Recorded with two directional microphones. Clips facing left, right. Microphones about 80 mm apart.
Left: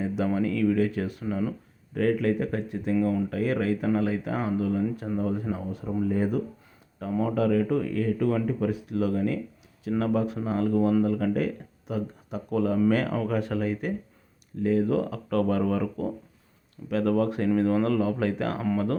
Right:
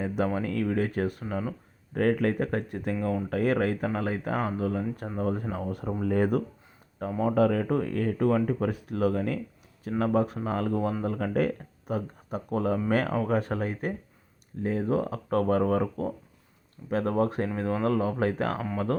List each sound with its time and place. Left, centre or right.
0.3 s speech: right
2.9 s speech: right
3.2 s speech: right
7.2 s speech: right